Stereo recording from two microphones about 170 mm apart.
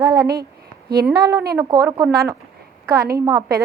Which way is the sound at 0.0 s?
20° right (ahead or behind).